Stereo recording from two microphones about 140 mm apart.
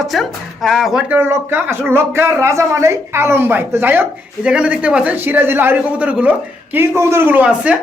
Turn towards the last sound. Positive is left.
turn(degrees=-10)  # may be behind; listen again after turning